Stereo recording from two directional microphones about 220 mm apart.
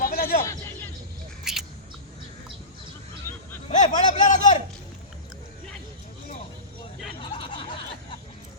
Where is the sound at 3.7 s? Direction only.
35° left (ahead or behind).